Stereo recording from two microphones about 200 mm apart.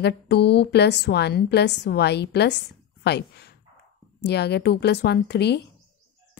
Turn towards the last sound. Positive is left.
turn(degrees=55)  # may be behind; listen again after turning